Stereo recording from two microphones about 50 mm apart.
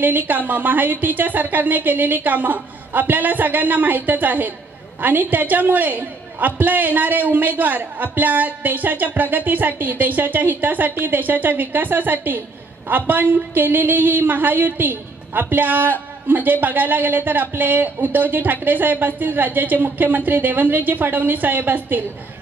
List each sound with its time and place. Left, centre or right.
0.0 s a woman's voice: right